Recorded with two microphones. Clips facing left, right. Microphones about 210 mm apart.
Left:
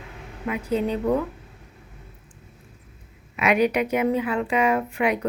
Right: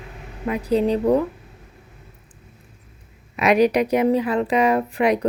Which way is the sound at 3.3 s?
40° right (ahead or behind).